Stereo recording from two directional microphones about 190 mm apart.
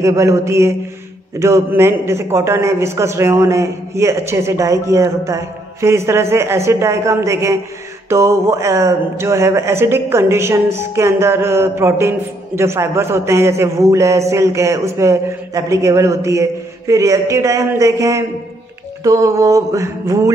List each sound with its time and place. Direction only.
0.0 s speech: 15° right (ahead or behind)